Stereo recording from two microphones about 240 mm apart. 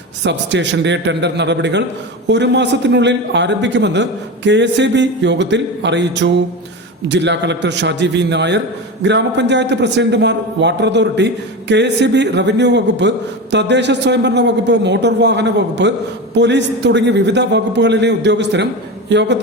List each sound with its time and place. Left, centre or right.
0.2 s a man's voice: right